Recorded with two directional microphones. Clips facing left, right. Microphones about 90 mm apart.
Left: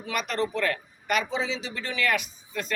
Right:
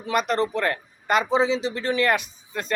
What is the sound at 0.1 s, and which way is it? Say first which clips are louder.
Speech: right 6 dB; 35° right (ahead or behind).